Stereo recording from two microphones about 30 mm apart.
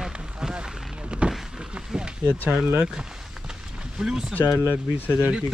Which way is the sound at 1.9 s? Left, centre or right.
Right.